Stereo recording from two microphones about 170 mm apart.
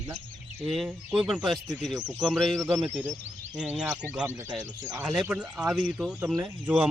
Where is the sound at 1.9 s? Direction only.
25° right (ahead or behind).